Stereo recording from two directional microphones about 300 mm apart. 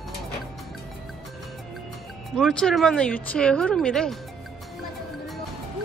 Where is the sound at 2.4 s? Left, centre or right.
Centre.